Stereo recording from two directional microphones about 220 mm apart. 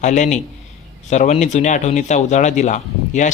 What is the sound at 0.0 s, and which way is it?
Speech, 30° left (ahead or behind).